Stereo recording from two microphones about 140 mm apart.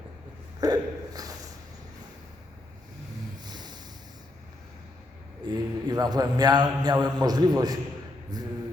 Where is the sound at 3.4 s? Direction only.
30° right (ahead or behind).